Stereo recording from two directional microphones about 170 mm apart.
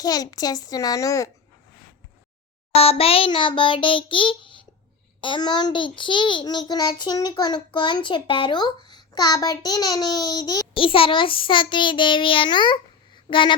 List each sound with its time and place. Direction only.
0.0 s a child's voice: 20° left (ahead or behind)
2.7 s a sound: 35° left (ahead or behind)
5.2 s a child's voice: 25° left (ahead or behind)